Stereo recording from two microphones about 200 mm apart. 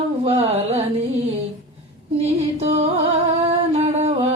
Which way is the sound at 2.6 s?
30° right (ahead or behind).